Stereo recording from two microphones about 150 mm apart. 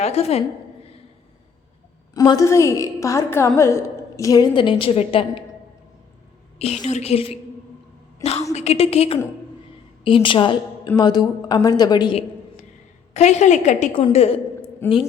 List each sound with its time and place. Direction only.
0.0 s a woman's voice: 45° left (ahead or behind)
2.1 s a woman's voice: 25° left (ahead or behind)
6.6 s a woman's voice: 45° left (ahead or behind)
10.2 s a woman's voice: 35° left (ahead or behind)
13.1 s a woman's voice: 50° left (ahead or behind)
14.8 s a woman's voice: 15° left (ahead or behind)